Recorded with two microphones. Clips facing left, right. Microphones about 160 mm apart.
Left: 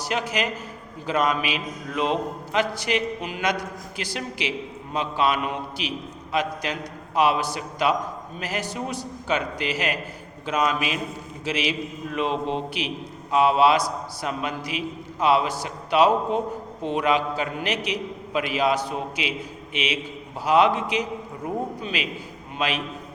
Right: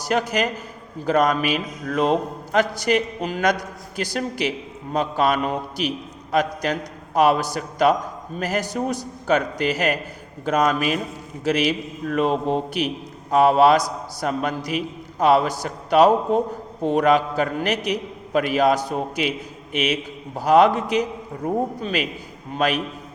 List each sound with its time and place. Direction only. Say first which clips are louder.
0.0 s a man's voice: right 4 dB; 45° right (ahead or behind)